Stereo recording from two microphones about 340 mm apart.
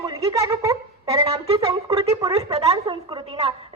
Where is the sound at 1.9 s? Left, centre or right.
Centre.